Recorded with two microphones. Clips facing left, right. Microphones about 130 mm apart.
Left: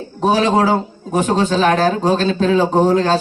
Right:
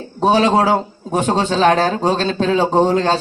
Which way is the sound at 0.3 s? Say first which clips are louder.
Right 1 dB; 30° right (ahead or behind).